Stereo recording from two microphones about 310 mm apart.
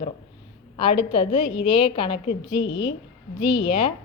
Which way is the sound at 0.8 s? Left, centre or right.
Centre.